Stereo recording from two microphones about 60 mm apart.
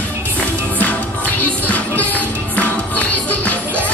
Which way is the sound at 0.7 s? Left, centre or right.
Left.